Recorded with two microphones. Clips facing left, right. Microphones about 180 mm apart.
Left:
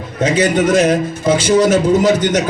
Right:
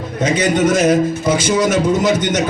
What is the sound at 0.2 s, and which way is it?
Speech, 10° left (ahead or behind).